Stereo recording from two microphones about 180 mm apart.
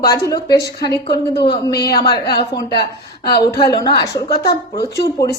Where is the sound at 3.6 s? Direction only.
20° left (ahead or behind).